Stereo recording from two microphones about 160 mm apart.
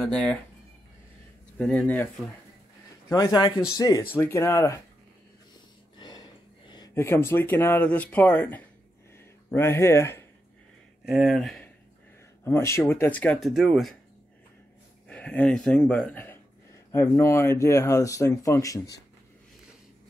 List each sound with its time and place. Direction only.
0.0 s speech: 5° left (ahead or behind)
1.6 s speech: 10° left (ahead or behind)
3.1 s speech: 20° left (ahead or behind)
5.9 s a sound: 25° left (ahead or behind)
7.0 s speech: 15° left (ahead or behind)
11.1 s speech: centre (ahead or behind)
12.4 s speech: 15° left (ahead or behind); by 13.9 s centre (ahead or behind)
15.0 s speech: 10° left (ahead or behind)